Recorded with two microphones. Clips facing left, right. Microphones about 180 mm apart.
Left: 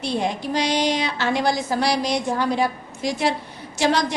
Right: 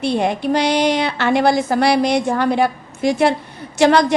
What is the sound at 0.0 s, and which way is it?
A woman's voice, 60° right (ahead or behind).